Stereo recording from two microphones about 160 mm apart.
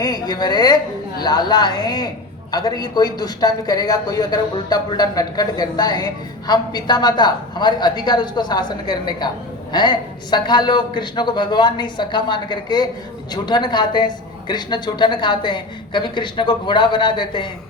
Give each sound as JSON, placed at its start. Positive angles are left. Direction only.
{"t": 0.0, "sound": "a woman's voice", "side_deg": 25}